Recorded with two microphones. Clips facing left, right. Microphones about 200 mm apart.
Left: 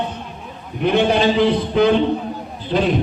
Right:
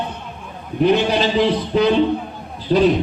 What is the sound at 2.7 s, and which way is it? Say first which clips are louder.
Speech: right 4 dB; 45° right (ahead or behind).